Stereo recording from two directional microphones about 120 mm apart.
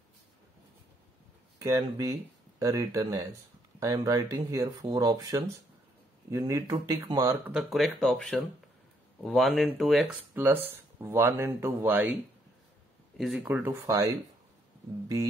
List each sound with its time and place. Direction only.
1.6 s speech: 30° right (ahead or behind)
7.7 s speech: centre (ahead or behind)
10.3 s speech: 15° right (ahead or behind)
13.2 s speech: 5° right (ahead or behind); by 14.1 s 25° right (ahead or behind)